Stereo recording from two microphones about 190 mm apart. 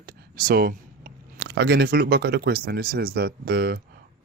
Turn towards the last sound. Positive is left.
turn(degrees=-55)  # may be behind; listen again after turning